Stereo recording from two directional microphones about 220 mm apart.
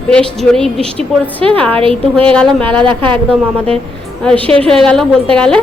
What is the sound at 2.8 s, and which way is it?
Speech, 20° right (ahead or behind).